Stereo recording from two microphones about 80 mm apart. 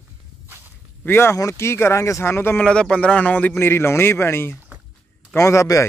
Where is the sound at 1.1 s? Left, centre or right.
Left.